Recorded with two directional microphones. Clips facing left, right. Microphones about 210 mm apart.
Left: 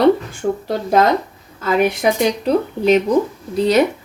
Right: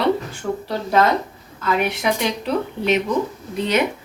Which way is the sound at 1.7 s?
40° left (ahead or behind).